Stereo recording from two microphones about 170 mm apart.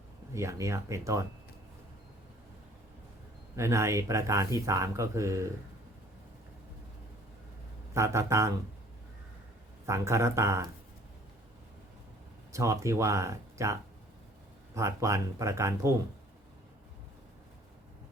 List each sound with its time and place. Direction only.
0.3 s speech: 15° right (ahead or behind)
3.5 s speech: 15° right (ahead or behind)
7.9 s speech: 15° right (ahead or behind)
9.8 s speech: 15° right (ahead or behind)
12.5 s speech: 20° right (ahead or behind)
14.8 s speech: 15° right (ahead or behind)